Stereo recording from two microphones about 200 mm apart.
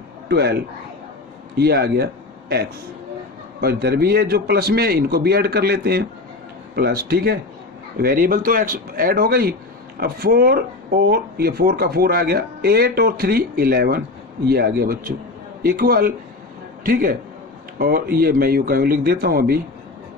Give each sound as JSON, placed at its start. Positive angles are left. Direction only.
{"t": 0.3, "sound": "speech", "side_deg": -55}
{"t": 1.6, "sound": "a man's voice", "side_deg": -50}
{"t": 3.6, "sound": "a man's voice", "side_deg": -50}